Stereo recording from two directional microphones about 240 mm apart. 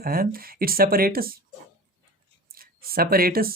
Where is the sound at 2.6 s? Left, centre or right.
Right.